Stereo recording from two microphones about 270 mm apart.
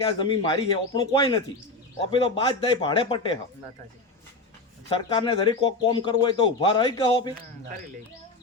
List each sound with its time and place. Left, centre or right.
0.2 s speech: centre
4.9 s speech: centre